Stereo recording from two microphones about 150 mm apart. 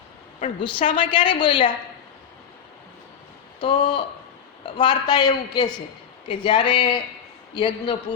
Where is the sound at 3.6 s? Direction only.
30° left (ahead or behind).